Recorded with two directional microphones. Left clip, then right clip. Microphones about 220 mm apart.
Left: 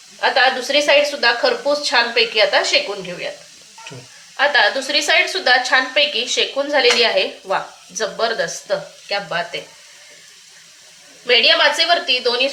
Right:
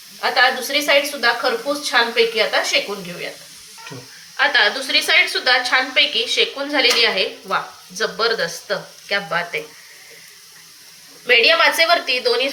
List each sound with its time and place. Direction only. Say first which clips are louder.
0.2 s a woman's voice: left 1 dB; 60° left (ahead or behind)
4.4 s a woman's voice: left 1 dB; 55° left (ahead or behind)
11.3 s a woman's voice: even; 40° left (ahead or behind)